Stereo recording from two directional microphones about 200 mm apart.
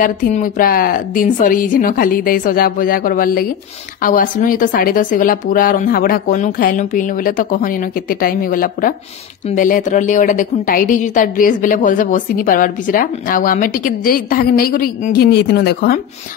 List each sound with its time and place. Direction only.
0.0 s a woman's voice: 45° left (ahead or behind)